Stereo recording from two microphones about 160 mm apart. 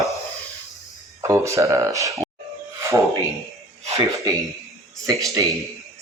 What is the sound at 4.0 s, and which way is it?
Speech, 20° right (ahead or behind).